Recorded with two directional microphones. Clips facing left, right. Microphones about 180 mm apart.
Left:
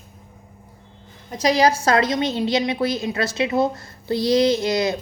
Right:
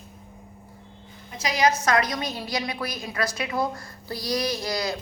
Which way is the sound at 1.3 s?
35° left (ahead or behind).